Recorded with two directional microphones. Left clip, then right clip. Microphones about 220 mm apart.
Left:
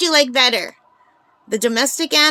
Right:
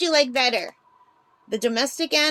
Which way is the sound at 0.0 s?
30° left (ahead or behind).